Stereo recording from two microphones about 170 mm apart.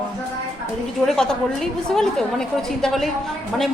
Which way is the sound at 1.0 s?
5° left (ahead or behind).